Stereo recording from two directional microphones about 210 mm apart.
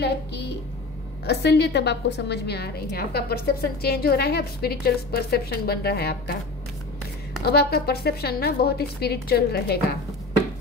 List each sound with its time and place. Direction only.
0.0 s a child's voice: 55° left (ahead or behind)
7.4 s a woman's voice: 50° left (ahead or behind)